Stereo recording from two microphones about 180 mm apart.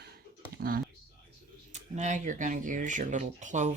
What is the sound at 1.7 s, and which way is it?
Speech, 40° right (ahead or behind).